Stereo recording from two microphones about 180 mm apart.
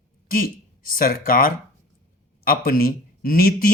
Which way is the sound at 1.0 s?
55° left (ahead or behind).